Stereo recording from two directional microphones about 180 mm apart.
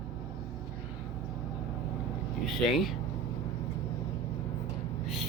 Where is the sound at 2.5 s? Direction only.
Centre (ahead or behind).